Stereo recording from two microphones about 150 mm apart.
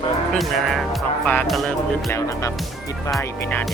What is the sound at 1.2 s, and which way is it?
Music, 10° left (ahead or behind).